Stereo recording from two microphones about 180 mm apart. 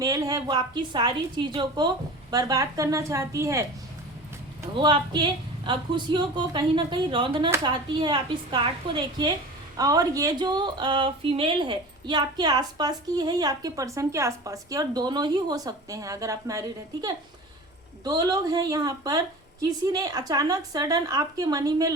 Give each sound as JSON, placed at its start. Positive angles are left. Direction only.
{"t": 0.0, "sound": "a woman's voice", "side_deg": -20}
{"t": 4.7, "sound": "speech", "side_deg": -25}